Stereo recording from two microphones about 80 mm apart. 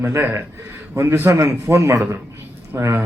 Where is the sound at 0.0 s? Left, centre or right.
Right.